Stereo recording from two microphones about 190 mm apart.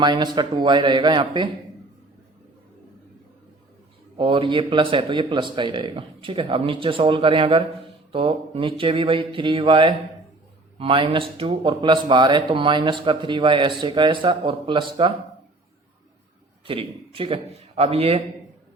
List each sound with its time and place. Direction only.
0.0 s speech: 25° right (ahead or behind)
4.2 s speech: 25° right (ahead or behind)
16.6 s speech: 30° right (ahead or behind)